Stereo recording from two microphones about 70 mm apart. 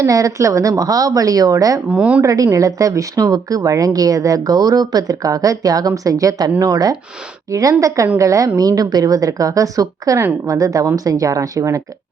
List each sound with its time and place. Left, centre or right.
0.0 s speech: right
1.8 s speech: centre
2.2 s speech: right